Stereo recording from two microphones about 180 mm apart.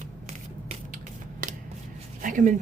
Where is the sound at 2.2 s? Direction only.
45° right (ahead or behind).